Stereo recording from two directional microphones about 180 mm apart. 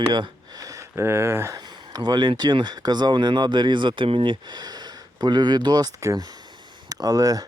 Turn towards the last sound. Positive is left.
turn(degrees=-20)  # may be behind; listen again after turning